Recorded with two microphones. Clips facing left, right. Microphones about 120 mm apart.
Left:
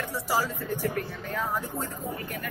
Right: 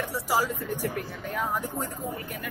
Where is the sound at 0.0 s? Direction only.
15° right (ahead or behind).